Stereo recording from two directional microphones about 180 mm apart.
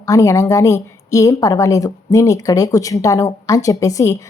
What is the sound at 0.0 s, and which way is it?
A woman's voice, 15° left (ahead or behind).